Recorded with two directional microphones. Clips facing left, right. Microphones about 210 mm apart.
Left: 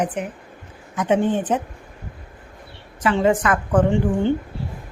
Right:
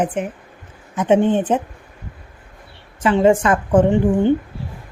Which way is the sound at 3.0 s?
25° right (ahead or behind).